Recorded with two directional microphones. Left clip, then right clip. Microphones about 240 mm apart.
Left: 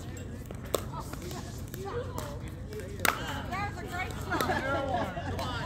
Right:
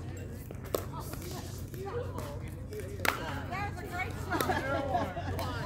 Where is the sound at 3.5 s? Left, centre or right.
Centre.